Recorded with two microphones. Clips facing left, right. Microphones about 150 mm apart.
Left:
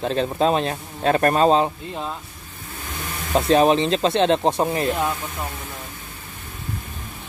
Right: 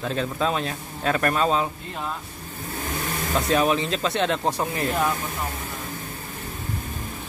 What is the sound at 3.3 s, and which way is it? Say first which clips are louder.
A man's voice: left 6 dB; 30° left (ahead or behind).